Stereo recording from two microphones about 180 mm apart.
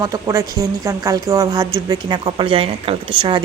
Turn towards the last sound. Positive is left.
turn(degrees=-25)  # may be behind; listen again after turning